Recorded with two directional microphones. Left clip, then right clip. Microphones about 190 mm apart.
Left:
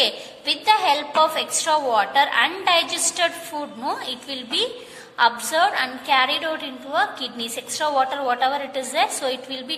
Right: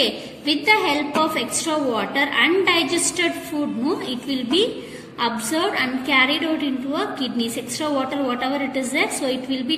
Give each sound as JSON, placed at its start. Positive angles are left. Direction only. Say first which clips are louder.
{"t": 0.0, "sound": "a woman's voice", "louder": "even", "side_deg": 40}